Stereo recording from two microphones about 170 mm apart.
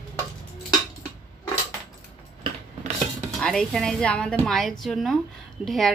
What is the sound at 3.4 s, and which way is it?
Speech, 5° left (ahead or behind).